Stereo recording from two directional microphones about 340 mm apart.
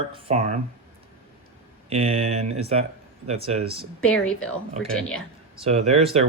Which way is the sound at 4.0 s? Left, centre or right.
Centre.